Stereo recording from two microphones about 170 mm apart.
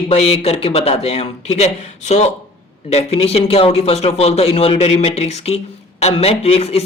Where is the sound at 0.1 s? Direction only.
35° left (ahead or behind).